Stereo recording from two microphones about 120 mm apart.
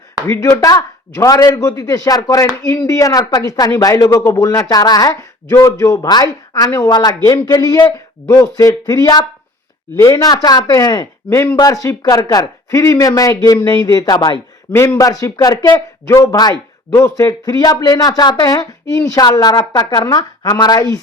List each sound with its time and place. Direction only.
0.3 s speech: 20° left (ahead or behind)
14.7 s speech: 20° left (ahead or behind)